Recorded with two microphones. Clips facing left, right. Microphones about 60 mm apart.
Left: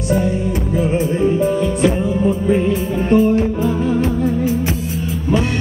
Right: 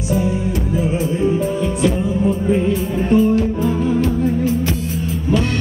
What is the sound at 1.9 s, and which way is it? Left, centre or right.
Music, left.